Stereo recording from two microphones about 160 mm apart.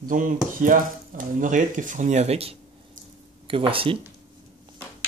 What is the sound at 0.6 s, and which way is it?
Speech, 55° right (ahead or behind).